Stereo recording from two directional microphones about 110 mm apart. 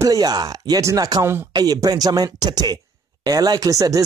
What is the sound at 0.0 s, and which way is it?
Speech, 35° right (ahead or behind).